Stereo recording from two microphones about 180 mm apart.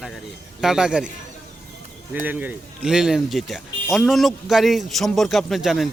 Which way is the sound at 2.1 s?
10° right (ahead or behind).